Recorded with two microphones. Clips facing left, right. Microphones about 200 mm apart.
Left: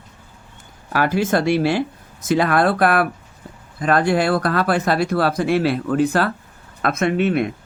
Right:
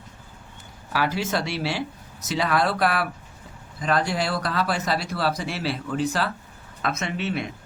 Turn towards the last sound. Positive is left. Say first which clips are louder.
# left 10 dB
turn(degrees=55)  # may be behind; listen again after turning